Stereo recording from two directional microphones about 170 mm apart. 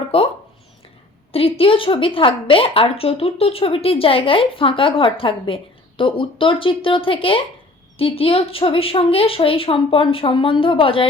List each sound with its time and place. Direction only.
0.1 s a woman's voice: 35° left (ahead or behind)
1.3 s a woman's voice: 35° left (ahead or behind)